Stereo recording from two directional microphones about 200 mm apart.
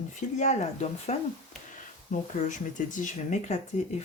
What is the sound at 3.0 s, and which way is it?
Speech, 35° left (ahead or behind).